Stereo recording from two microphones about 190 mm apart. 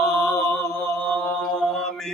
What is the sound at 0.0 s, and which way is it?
Chant, centre (ahead or behind).